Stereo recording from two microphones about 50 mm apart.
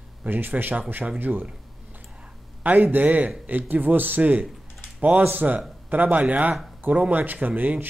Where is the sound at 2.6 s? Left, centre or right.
Right.